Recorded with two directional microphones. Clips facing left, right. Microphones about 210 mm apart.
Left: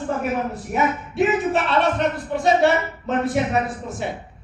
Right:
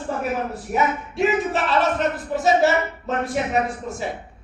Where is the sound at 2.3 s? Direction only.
5° right (ahead or behind).